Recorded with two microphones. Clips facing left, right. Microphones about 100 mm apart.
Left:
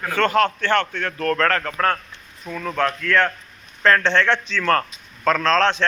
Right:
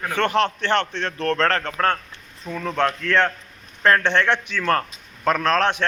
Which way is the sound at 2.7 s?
25° right (ahead or behind).